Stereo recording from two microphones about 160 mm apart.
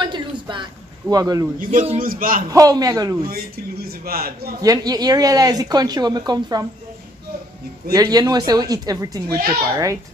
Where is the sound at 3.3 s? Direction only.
75° right (ahead or behind).